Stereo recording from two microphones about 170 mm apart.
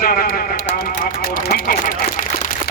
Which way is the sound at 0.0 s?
60° left (ahead or behind).